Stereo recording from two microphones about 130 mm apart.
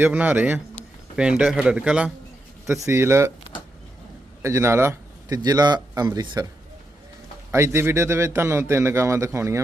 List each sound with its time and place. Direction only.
0.0 s a man's voice: 15° right (ahead or behind)
2.8 s a man's voice: 20° right (ahead or behind)
4.4 s a man's voice: 20° right (ahead or behind)
7.5 s a man's voice: 20° right (ahead or behind)